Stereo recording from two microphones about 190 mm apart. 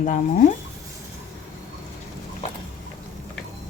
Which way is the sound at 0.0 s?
45° left (ahead or behind).